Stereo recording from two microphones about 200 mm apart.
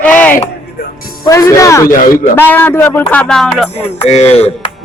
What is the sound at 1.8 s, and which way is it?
Speech, 45° left (ahead or behind).